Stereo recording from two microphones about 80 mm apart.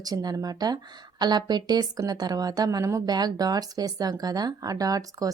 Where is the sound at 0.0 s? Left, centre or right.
Right.